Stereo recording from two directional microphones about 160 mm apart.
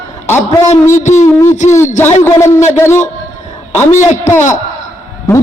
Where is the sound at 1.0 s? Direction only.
45° left (ahead or behind).